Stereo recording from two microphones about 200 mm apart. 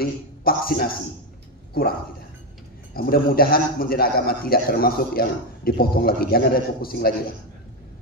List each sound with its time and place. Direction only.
0.0 s a man's voice: 50° left (ahead or behind)